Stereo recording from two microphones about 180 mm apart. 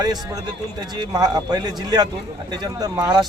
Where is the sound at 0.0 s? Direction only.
25° right (ahead or behind).